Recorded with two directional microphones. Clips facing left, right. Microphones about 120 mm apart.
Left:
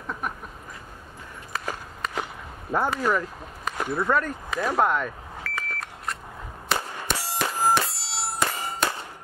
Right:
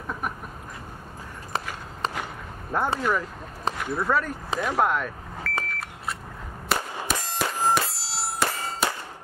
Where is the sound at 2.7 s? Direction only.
10° left (ahead or behind).